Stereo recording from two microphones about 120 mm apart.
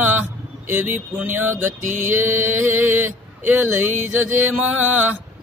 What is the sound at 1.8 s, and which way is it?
Mantra, 90° right.